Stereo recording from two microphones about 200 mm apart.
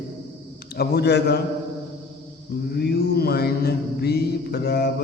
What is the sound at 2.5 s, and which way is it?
Mantra, 50° left (ahead or behind).